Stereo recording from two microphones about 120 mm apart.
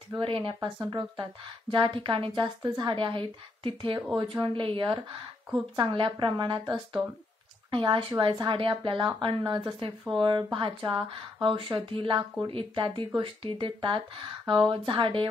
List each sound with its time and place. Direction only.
0.1 s a woman's voice: 45° right (ahead or behind)